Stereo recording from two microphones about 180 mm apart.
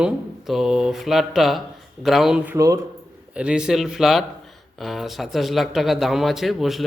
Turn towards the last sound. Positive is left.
turn(degrees=0)  # may be behind; listen again after turning